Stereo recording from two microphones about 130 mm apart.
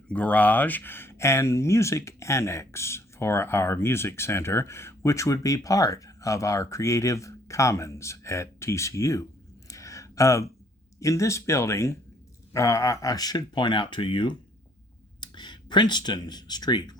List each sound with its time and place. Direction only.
0.1 s speech: 10° left (ahead or behind)
9.6 s a sound: 25° left (ahead or behind)
11.0 s speech: 25° left (ahead or behind)